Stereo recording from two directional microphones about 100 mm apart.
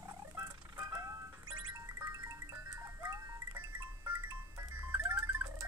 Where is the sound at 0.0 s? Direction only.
30° right (ahead or behind).